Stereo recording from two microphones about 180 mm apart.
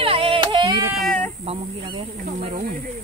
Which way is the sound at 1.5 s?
30° right (ahead or behind).